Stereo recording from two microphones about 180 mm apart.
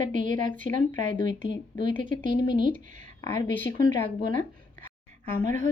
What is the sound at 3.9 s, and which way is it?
Speech, 25° left (ahead or behind).